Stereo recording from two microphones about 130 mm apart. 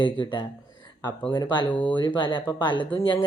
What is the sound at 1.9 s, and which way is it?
Speech, 40° left (ahead or behind).